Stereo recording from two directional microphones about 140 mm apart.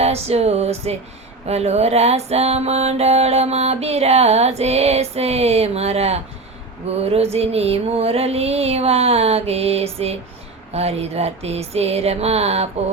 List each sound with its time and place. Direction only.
0.0 s mantra: 50° right (ahead or behind)